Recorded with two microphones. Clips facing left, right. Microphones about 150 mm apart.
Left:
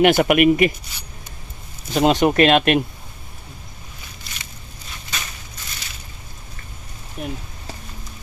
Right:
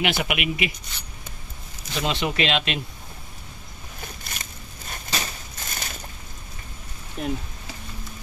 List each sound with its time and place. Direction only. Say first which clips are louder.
0.0 s speech: left 12 dB; 50° left (ahead or behind)
2.0 s speech: left 10 dB; 50° left (ahead or behind)
4.3 s a sound: right 1 dB; 50° right (ahead or behind)
5.1 s crushing: right 3 dB; 45° right (ahead or behind)
7.2 s speech: right 1 dB; 5° left (ahead or behind)